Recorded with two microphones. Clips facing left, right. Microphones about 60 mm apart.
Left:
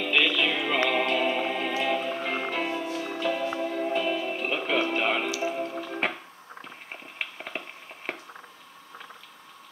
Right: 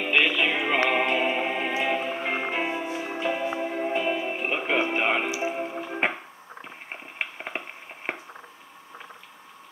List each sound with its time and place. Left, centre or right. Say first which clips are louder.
0.0 s music: right 2 dB; right